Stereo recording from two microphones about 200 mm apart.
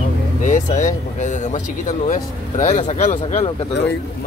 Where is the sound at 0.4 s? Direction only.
40° left (ahead or behind).